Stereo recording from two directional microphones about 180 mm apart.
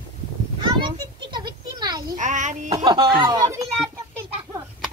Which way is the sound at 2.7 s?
25° right (ahead or behind).